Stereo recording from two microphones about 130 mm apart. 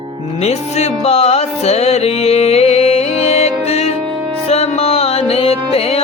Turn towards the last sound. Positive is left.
turn(degrees=50)  # may be behind; listen again after turning